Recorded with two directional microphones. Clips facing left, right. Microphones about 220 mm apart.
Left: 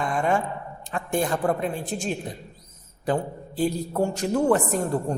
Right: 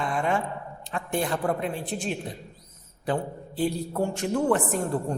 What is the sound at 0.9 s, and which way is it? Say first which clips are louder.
A woman's voice: left 3 dB; 45° left (ahead or behind).